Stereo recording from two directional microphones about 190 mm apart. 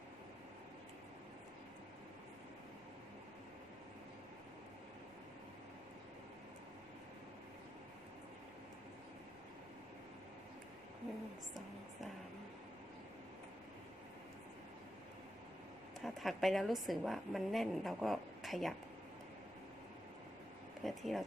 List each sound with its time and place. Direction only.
16.0 s a woman's voice: centre (ahead or behind)
20.8 s a woman's voice: centre (ahead or behind)